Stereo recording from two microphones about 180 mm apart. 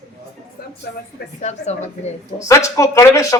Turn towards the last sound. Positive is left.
turn(degrees=15)  # may be behind; listen again after turning